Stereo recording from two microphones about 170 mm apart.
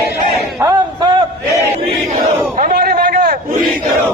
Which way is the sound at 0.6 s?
25° right (ahead or behind).